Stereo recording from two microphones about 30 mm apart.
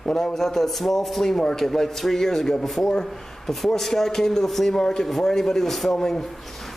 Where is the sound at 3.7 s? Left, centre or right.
Centre.